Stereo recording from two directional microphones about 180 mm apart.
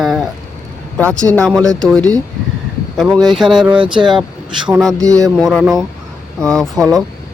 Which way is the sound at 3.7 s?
30° right (ahead or behind).